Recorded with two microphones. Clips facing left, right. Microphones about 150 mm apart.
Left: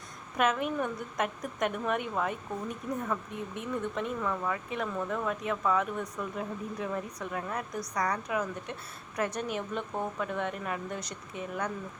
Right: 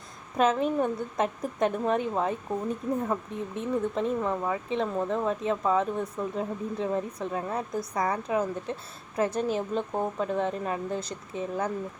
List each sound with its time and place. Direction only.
0.3 s a woman's voice: 30° right (ahead or behind)